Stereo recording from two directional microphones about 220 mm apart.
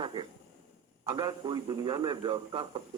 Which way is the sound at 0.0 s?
20° right (ahead or behind).